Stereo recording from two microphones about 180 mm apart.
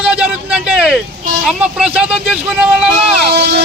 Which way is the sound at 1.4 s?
5° right (ahead or behind).